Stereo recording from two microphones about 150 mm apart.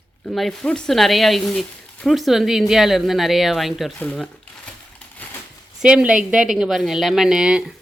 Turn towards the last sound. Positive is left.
turn(degrees=-5)  # may be behind; listen again after turning